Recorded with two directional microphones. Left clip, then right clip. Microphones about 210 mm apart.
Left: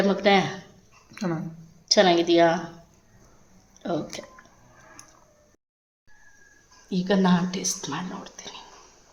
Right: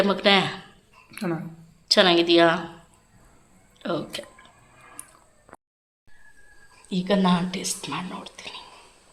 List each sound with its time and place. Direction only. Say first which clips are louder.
0.0 s a woman's voice: right 1 dB; 5° left (ahead or behind)
3.8 s speech: right 1 dB; 5° left (ahead or behind)
6.8 s speech: right 1 dB; 5° left (ahead or behind)